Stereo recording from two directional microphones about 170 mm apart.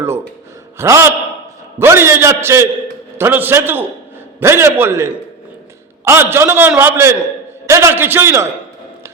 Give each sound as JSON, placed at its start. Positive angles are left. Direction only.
{"t": 0.8, "sound": "a man's voice", "side_deg": -15}